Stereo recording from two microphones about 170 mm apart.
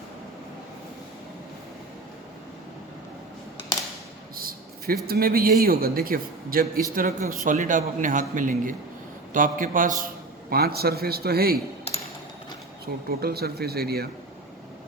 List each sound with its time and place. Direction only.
4.4 s a sound: 60° right (ahead or behind)
5.0 s a man's voice: 65° right (ahead or behind)
10.5 s speech: 65° right (ahead or behind)
12.8 s speech: 65° right (ahead or behind)